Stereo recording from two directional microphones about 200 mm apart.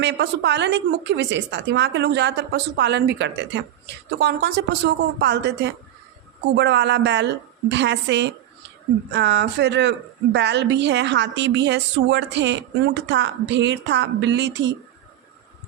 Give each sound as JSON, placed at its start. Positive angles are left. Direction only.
{"t": 0.0, "sound": "a woman's voice", "side_deg": -60}